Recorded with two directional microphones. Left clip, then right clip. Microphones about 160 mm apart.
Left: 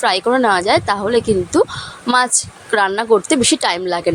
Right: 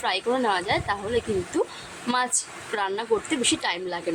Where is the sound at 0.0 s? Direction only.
40° left (ahead or behind).